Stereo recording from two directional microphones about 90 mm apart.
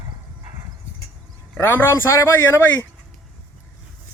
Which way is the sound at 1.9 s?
35° left (ahead or behind).